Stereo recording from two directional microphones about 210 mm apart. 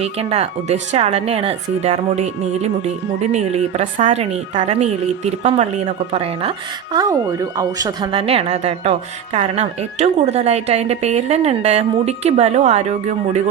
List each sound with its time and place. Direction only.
0.0 s a woman's voice: 30° right (ahead or behind)